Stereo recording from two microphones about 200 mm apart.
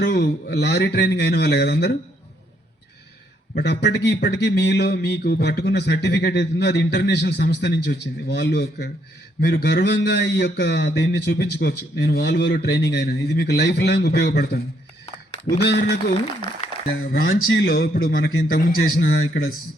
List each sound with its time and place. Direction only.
0.0 s speech: 55° left (ahead or behind)
3.5 s speech: 55° left (ahead or behind)
15.5 s speech: 20° left (ahead or behind)
16.9 s a man's voice: 50° left (ahead or behind)
17.3 s a man's voice: 80° left; by 19.5 s 50° left (ahead or behind)